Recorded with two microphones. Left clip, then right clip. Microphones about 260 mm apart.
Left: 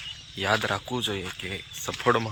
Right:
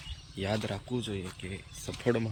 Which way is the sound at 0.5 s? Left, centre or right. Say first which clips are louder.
Left 9 dB; left.